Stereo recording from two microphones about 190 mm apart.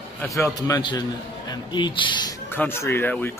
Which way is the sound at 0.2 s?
15° left (ahead or behind).